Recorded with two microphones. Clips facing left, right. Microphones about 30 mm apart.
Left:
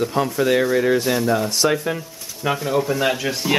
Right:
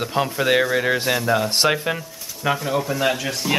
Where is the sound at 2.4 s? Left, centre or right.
Centre.